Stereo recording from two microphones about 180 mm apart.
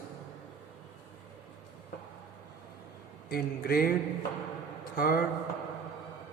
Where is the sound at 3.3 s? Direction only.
55° left (ahead or behind).